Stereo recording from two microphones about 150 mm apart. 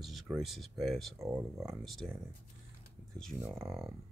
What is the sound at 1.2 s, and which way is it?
Speech, 10° right (ahead or behind).